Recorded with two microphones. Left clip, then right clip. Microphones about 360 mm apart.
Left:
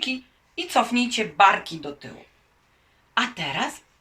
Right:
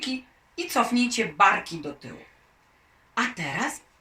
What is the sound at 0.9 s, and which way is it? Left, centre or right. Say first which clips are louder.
Speech: left 1 dB; left.